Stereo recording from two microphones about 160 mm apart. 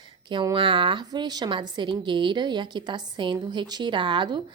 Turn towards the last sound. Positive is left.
turn(degrees=-30)  # may be behind; listen again after turning